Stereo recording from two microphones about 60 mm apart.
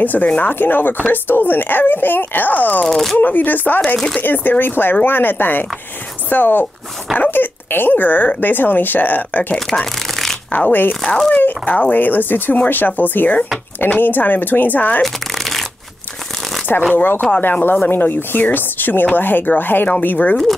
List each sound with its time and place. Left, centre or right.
0.0 s speech: left
2.9 s speech: centre
3.2 s speech: left
3.8 s speech: centre
4.2 s speech: left
9.7 s shuffling cards: centre
10.5 s speech: left
16.9 s speech: left